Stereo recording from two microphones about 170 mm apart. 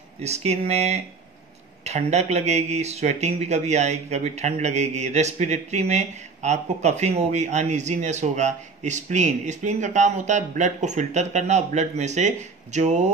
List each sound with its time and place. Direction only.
0.2 s speech: 40° right (ahead or behind)